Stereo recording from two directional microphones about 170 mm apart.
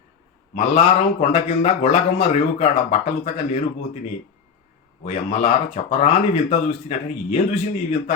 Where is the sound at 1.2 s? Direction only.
35° left (ahead or behind).